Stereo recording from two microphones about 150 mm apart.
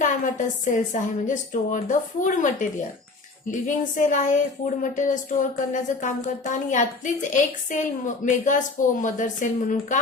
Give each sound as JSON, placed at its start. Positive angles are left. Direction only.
{"t": 0.0, "sound": "speech", "side_deg": 60}
{"t": 3.7, "sound": "speech", "side_deg": 60}